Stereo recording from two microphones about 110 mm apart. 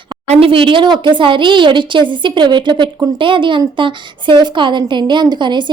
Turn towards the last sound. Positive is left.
turn(degrees=-45)  # may be behind; listen again after turning